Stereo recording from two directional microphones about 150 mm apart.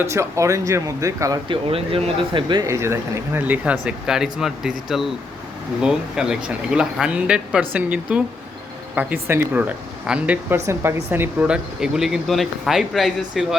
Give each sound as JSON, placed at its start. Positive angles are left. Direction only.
{"t": 0.0, "sound": "speech", "side_deg": -20}
{"t": 1.5, "sound": "speech", "side_deg": -35}
{"t": 2.6, "sound": "speech", "side_deg": -20}
{"t": 9.2, "sound": "speech", "side_deg": -15}